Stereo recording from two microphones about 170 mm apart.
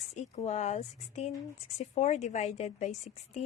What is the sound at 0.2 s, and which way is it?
A woman's voice, 40° left (ahead or behind).